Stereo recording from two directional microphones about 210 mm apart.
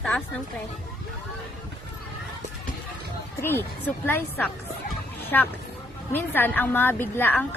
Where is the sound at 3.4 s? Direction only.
10° left (ahead or behind).